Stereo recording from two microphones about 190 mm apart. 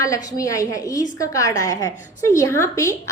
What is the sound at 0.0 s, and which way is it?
A woman's voice, 15° left (ahead or behind).